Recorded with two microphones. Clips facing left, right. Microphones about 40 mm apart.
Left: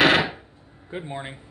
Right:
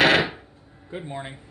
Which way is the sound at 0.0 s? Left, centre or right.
Centre.